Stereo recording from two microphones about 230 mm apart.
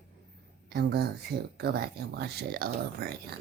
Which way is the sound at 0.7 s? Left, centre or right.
Right.